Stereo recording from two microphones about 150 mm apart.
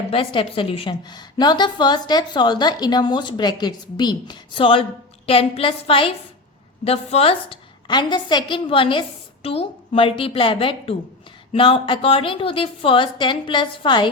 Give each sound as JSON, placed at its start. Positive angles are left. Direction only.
{"t": 0.1, "sound": "a woman's voice", "side_deg": 35}